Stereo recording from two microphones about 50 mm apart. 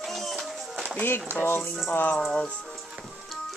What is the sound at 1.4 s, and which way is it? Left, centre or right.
Speech, left.